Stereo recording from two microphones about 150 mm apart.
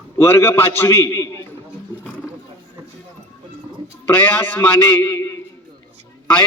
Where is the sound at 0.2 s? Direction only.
15° left (ahead or behind).